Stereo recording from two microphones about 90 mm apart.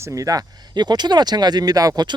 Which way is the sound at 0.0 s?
40° right (ahead or behind).